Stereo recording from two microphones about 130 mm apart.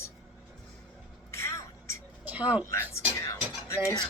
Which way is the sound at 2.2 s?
10° right (ahead or behind).